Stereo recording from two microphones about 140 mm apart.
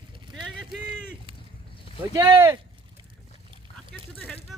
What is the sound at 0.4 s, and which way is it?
Run, 5° right (ahead or behind).